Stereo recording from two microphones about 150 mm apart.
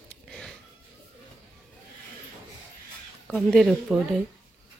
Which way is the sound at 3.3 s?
Centre (ahead or behind).